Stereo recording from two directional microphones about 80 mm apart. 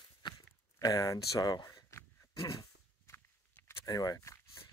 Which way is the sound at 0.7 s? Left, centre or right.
Left.